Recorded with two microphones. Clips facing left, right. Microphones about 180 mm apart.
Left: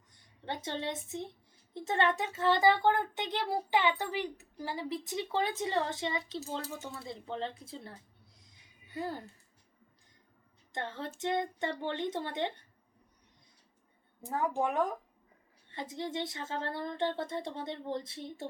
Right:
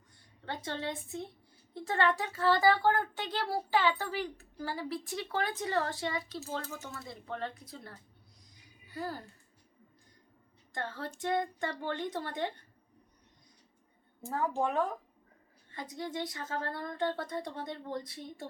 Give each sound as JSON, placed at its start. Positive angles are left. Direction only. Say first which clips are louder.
{"t": 0.4, "sound": "speech", "louder": "left 1 dB", "side_deg": 20}
{"t": 10.7, "sound": "speech", "louder": "even", "side_deg": 20}
{"t": 14.2, "sound": "speech", "louder": "even", "side_deg": 15}